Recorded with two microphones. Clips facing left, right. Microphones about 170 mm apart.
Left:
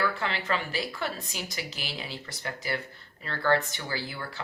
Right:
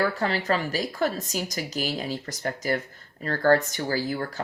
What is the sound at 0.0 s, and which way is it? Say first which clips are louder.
Speech: right 5 dB; 40° right (ahead or behind).